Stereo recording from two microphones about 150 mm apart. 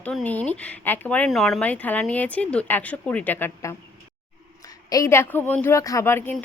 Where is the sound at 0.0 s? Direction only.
10° left (ahead or behind).